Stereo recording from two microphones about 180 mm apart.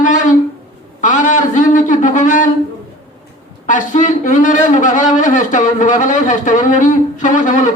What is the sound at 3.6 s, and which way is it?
A man's voice, 45° left (ahead or behind).